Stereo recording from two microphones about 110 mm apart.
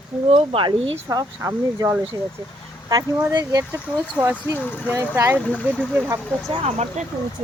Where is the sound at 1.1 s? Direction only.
30° right (ahead or behind).